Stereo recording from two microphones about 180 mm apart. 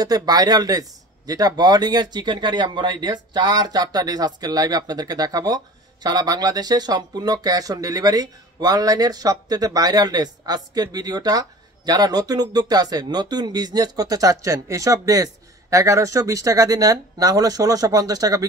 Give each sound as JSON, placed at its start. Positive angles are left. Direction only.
{"t": 0.0, "sound": "speech", "side_deg": -20}